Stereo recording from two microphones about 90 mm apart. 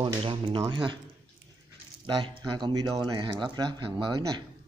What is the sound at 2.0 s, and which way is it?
Speech, 55° right (ahead or behind).